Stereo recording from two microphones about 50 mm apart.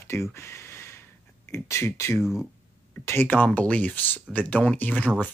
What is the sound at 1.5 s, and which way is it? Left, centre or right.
Speech, left.